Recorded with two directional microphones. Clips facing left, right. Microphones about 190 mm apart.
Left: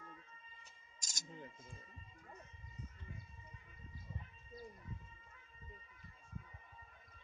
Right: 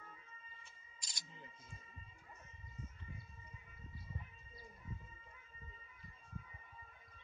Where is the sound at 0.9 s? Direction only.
45° left (ahead or behind).